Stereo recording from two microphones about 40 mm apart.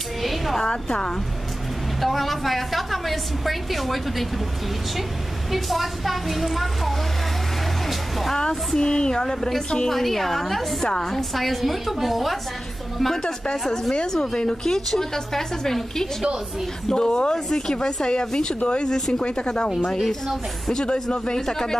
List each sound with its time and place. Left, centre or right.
0.2 s a sound: centre
0.6 s a woman's voice: centre
2.0 s a woman's voice: centre
5.5 s a woman's voice: centre
8.4 s a woman's voice: centre
9.8 s a woman's voice: centre
13.0 s a woman's voice: centre
18.9 s a woman's voice: centre
19.2 s a woman's voice: left
20.7 s speech: left
21.4 s a woman's voice: centre